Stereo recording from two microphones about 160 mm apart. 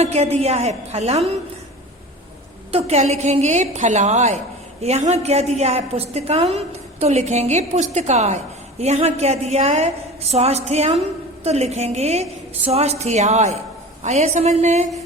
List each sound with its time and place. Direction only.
0.0 s a woman's voice: 40° right (ahead or behind)
2.7 s a woman's voice: 40° right (ahead or behind)